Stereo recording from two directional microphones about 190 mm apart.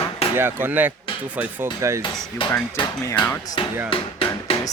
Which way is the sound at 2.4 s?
25° left (ahead or behind).